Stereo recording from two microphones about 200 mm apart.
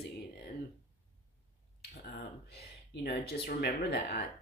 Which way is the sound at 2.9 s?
50° left (ahead or behind).